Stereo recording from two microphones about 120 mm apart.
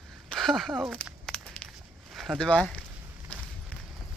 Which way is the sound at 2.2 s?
5° left (ahead or behind).